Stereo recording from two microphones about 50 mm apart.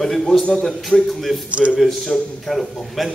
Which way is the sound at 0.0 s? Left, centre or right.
Centre.